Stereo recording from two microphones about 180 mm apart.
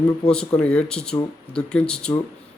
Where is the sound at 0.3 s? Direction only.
5° left (ahead or behind).